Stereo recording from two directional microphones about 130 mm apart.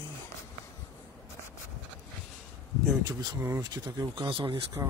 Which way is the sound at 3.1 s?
25° right (ahead or behind).